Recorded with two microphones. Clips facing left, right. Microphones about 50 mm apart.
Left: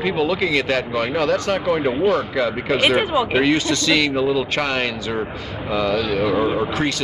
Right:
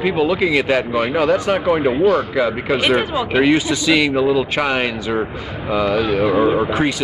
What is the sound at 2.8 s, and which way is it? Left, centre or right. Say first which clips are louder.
Speech: left 2 dB; centre.